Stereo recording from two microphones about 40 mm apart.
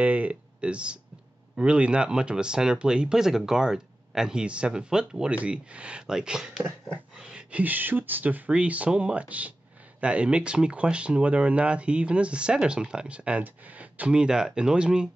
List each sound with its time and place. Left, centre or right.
0.0 s a sound: right
1.6 s speech: right
5.3 s speech: right
6.0 s speech: centre
7.2 s a sound: centre
7.6 s speech: right
8.5 s speech: right
13.4 s speech: right
14.1 s speech: right